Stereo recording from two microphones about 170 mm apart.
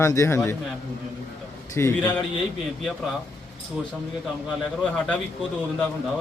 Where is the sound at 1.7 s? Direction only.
15° left (ahead or behind).